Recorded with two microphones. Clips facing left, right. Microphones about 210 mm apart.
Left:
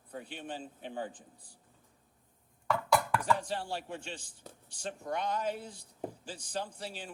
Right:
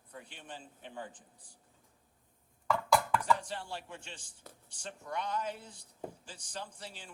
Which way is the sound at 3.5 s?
35° left (ahead or behind).